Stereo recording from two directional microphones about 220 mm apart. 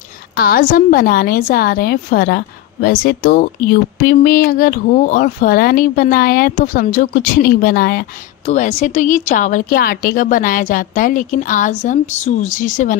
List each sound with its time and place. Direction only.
0.4 s a woman's voice: 40° left (ahead or behind)